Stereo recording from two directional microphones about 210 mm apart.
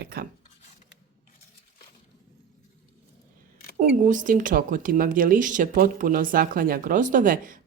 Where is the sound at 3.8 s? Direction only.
40° right (ahead or behind).